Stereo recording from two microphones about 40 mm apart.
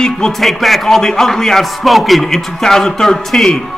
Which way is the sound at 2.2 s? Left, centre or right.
Centre.